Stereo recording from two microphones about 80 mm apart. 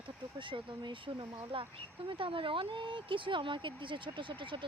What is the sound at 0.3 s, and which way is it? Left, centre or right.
Speech, right.